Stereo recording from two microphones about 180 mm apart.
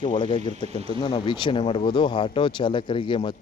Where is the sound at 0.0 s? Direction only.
30° left (ahead or behind).